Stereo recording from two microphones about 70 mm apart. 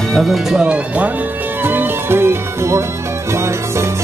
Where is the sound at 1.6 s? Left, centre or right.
Right.